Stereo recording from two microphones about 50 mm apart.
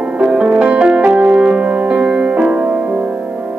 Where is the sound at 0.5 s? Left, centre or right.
Right.